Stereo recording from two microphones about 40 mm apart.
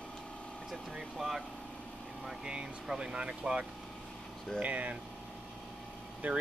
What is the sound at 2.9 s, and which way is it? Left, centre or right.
Speech, right.